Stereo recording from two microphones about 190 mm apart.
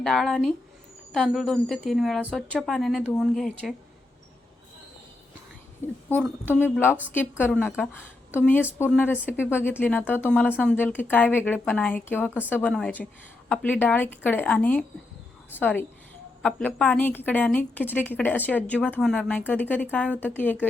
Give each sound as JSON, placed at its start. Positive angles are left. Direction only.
{"t": 0.0, "sound": "a woman's voice", "side_deg": 0}
{"t": 6.5, "sound": "a woman's voice", "side_deg": 10}